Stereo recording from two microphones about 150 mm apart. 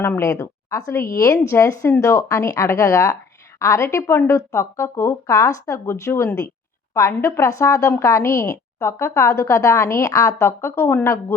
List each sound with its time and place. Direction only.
0.0 s a woman's voice: 20° left (ahead or behind)